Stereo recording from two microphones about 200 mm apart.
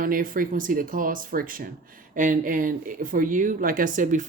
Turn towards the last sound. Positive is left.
turn(degrees=-40)  # may be behind; listen again after turning